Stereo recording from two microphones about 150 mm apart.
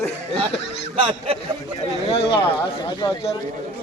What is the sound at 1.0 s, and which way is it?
Speech, 40° right (ahead or behind).